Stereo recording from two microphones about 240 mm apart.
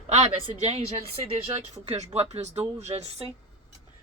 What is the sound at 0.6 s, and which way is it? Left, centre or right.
Speech, right.